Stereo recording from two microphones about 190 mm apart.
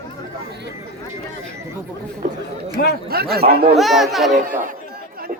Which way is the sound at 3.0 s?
55° right (ahead or behind).